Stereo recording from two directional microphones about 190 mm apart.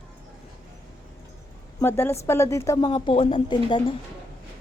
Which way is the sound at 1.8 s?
10° left (ahead or behind).